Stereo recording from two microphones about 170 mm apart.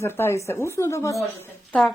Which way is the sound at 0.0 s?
15° left (ahead or behind).